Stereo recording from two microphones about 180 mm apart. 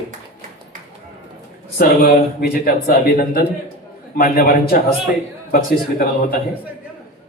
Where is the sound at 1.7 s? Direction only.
60° left (ahead or behind).